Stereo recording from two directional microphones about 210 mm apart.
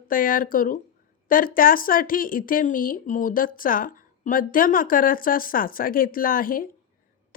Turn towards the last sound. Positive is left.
turn(degrees=40)  # may be behind; listen again after turning